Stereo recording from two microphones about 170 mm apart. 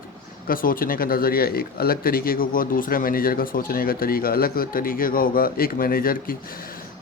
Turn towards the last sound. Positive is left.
turn(degrees=60)  # may be behind; listen again after turning